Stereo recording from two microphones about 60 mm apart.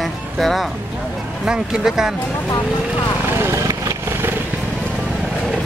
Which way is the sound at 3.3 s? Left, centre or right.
Right.